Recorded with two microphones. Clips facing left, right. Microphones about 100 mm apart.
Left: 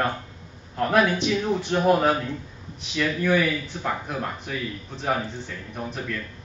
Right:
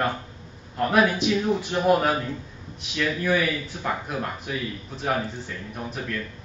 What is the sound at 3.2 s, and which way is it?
A man's voice, 5° right (ahead or behind).